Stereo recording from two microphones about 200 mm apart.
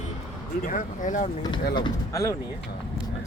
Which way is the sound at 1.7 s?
20° left (ahead or behind).